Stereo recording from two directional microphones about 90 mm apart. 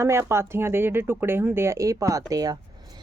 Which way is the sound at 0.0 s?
30° right (ahead or behind).